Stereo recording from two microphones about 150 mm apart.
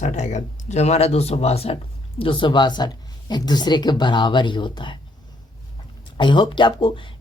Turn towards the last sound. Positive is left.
turn(degrees=35)  # may be behind; listen again after turning